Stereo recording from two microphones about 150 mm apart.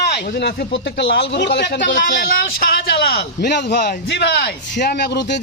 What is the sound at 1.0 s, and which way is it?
A man's voice, 90° left.